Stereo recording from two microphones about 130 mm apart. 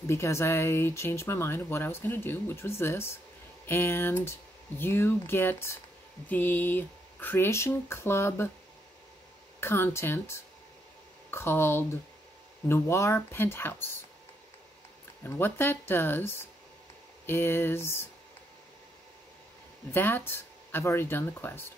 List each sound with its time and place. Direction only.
0.0 s speech: 20° left (ahead or behind)
9.6 s speech: 20° left (ahead or behind)
15.2 s speech: 15° left (ahead or behind)
19.9 s speech: 15° left (ahead or behind)